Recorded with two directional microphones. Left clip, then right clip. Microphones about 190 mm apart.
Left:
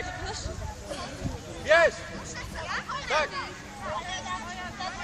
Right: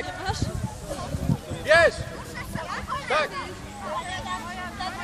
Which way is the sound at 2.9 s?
45° left (ahead or behind).